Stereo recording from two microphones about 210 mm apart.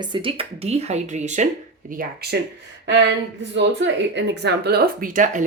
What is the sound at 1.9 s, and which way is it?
Speech, 50° right (ahead or behind).